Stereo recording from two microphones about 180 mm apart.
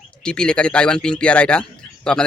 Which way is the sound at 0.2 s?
5° left (ahead or behind).